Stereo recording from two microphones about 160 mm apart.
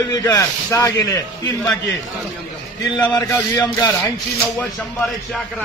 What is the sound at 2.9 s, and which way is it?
Speech, 20° left (ahead or behind).